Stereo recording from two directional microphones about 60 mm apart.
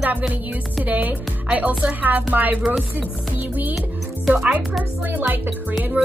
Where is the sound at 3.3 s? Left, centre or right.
Right.